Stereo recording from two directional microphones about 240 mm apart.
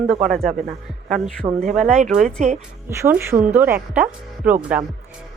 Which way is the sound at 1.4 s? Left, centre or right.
Centre.